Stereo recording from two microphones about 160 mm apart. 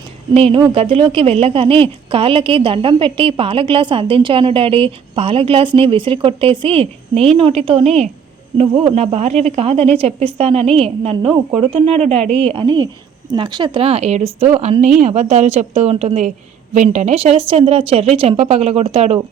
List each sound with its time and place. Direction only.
0.3 s a woman's voice: 35° right (ahead or behind)
9.1 s a woman's voice: 40° right (ahead or behind)